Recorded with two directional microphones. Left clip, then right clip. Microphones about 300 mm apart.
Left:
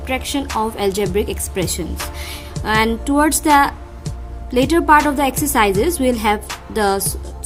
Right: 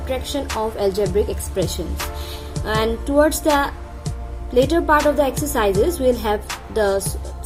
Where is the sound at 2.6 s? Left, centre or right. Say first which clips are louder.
Left 4 dB; left.